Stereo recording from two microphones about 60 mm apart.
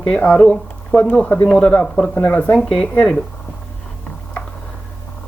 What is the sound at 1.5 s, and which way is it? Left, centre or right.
Speech, centre.